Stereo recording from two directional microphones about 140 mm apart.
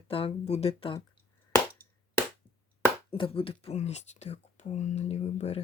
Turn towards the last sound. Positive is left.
turn(degrees=50)  # may be behind; listen again after turning